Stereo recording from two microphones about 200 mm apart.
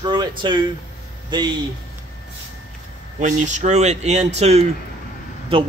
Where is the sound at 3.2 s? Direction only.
35° right (ahead or behind).